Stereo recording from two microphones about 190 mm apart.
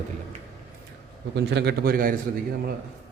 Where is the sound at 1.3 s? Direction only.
65° right (ahead or behind).